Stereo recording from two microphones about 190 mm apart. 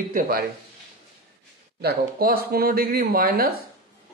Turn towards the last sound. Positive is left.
turn(degrees=-50)  # may be behind; listen again after turning